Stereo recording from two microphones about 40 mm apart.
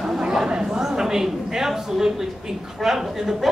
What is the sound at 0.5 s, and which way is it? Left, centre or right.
A man's voice, centre.